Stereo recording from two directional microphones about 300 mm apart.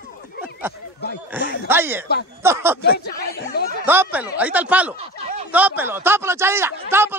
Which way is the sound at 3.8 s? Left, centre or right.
Centre.